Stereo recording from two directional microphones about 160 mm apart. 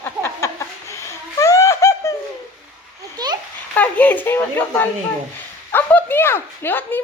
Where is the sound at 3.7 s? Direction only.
10° left (ahead or behind).